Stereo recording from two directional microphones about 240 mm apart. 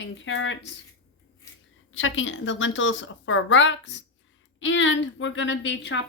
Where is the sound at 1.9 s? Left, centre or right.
Left.